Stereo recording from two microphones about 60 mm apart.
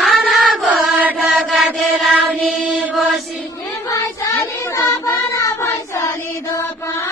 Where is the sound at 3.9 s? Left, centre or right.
Left.